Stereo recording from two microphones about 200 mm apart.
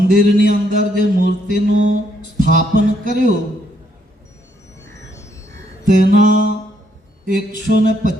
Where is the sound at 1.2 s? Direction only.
55° left (ahead or behind).